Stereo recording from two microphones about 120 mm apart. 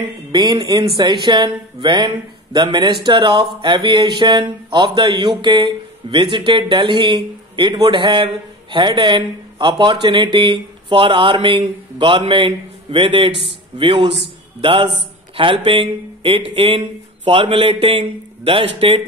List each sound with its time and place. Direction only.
0.3 s a man's voice: 40° right (ahead or behind)